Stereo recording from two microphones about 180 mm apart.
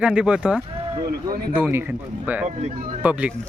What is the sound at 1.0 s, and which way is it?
Speech, 55° right (ahead or behind).